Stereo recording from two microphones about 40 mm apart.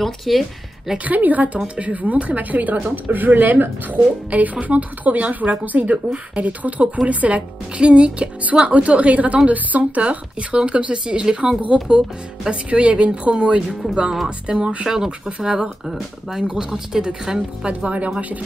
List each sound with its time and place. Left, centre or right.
0.0 s a woman's voice: centre
0.9 s speech: right
10.5 s a woman's voice: right
14.9 s a woman's voice: centre
17.6 s speech: right